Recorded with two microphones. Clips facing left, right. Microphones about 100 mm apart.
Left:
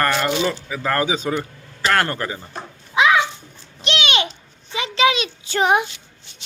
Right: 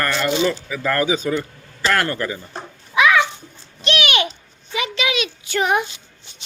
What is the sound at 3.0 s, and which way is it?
Babbling, 25° left (ahead or behind).